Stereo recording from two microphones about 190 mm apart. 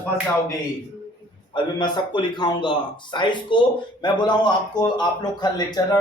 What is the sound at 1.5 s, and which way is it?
A man's voice, 25° left (ahead or behind).